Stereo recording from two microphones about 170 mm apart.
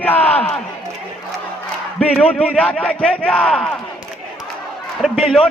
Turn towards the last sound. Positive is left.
turn(degrees=5)  # may be behind; listen again after turning